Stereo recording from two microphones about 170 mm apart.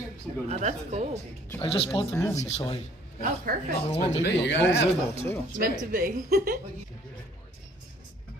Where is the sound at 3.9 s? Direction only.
90° left.